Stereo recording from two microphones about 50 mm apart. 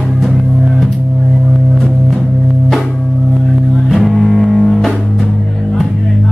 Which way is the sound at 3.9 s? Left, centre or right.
Centre.